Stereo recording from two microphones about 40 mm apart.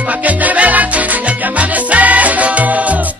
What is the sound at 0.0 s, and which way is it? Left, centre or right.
Music, right.